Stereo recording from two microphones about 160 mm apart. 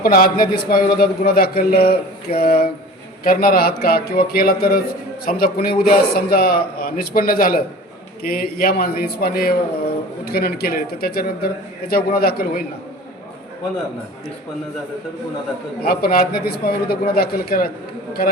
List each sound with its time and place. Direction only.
0.0 s a man's voice: 70° left (ahead or behind)
15.8 s a man's voice: 65° left (ahead or behind)